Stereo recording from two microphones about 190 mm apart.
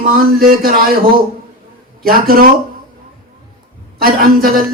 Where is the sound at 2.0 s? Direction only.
50° right (ahead or behind).